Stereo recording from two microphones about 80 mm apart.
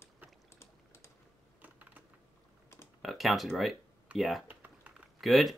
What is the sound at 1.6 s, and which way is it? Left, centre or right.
Typing, centre.